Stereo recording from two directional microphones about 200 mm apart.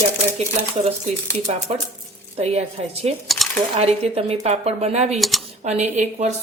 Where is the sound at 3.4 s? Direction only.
Centre (ahead or behind).